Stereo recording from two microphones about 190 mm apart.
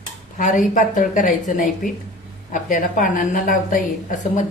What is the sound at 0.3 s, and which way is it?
A woman's voice, 45° left (ahead or behind).